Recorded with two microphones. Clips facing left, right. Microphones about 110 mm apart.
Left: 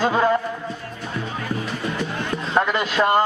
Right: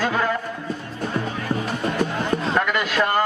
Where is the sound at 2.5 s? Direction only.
25° left (ahead or behind).